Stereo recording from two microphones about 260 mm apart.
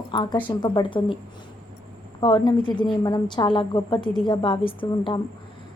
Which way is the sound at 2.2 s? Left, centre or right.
Centre.